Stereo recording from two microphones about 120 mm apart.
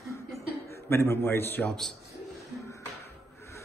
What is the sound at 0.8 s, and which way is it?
Speech, 20° left (ahead or behind).